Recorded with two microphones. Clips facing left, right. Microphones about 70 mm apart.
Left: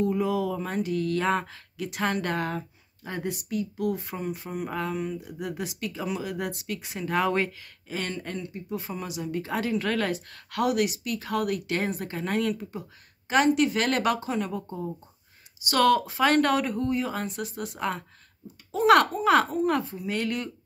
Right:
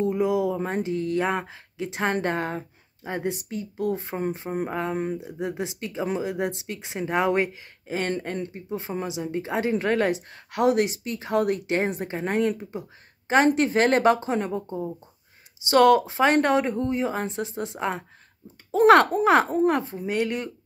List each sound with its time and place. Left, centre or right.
0.0 s a sound: right
0.6 s speech: right
5.2 s speech: right
15.7 s speech: right
19.2 s speech: right